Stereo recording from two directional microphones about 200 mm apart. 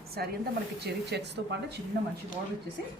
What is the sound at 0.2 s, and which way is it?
A woman's voice, 50° right (ahead or behind).